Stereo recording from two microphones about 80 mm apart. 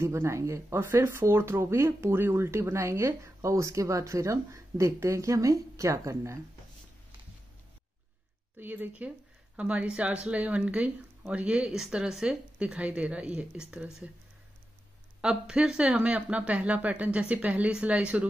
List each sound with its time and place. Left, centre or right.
0.0 s speech: right
8.5 s speech: right
15.2 s speech: centre